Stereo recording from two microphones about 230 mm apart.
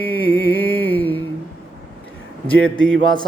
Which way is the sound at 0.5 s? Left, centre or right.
Centre.